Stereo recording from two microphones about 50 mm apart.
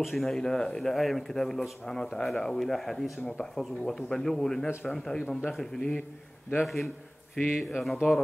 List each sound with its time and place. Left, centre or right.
0.0 s speech: centre
0.3 s speech: centre
6.6 s speech: centre